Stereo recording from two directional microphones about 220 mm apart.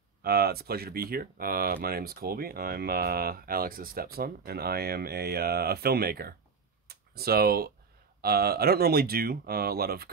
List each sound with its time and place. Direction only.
0.2 s speech: 45° right (ahead or behind)